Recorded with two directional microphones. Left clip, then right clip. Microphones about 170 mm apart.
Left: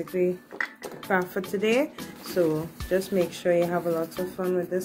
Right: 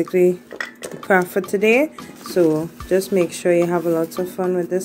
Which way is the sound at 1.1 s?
45° right (ahead or behind).